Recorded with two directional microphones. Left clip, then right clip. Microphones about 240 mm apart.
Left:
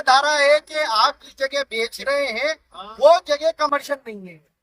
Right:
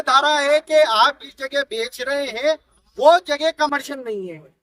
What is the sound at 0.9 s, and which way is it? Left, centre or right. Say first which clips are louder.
Speech: right 2 dB; right.